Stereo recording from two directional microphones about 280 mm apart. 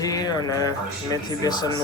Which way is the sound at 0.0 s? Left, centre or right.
Centre.